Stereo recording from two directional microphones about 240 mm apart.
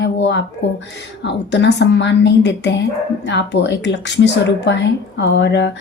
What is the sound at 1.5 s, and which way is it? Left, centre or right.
A woman's voice, left.